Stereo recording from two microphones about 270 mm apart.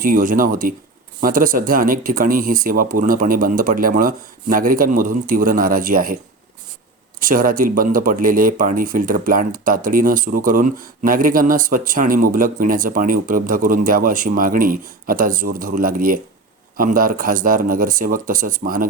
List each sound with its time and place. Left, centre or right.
0.0 s speech: right
7.2 s speech: right